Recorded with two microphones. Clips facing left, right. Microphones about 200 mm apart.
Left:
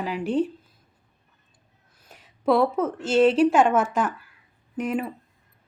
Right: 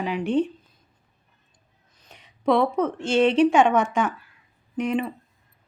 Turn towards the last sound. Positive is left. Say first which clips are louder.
# right 2 dB
turn(degrees=5)  # may be behind; listen again after turning